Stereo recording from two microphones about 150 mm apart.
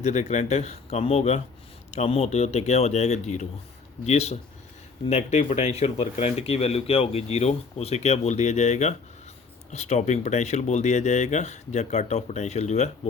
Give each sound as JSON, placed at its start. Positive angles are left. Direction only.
{"t": 0.0, "sound": "speech", "side_deg": 50}